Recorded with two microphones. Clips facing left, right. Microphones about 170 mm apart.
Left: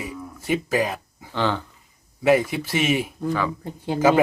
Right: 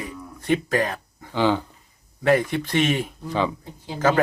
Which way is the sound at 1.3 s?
15° right (ahead or behind).